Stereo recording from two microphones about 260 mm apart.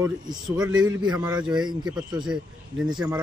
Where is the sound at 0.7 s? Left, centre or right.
Right.